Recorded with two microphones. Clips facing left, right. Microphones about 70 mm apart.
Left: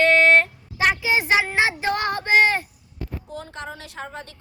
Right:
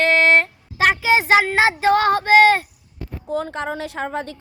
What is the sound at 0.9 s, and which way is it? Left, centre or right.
Speech, right.